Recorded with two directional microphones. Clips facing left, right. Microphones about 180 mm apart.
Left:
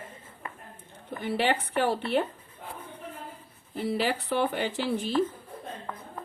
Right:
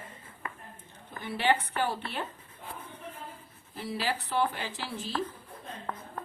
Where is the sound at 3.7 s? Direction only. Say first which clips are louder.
Left 5 dB; 60° left (ahead or behind).